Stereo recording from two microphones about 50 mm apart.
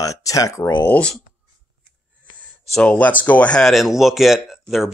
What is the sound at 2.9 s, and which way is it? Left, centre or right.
Speech, left.